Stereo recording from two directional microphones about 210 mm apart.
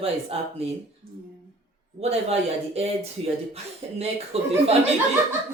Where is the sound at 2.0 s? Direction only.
30° right (ahead or behind).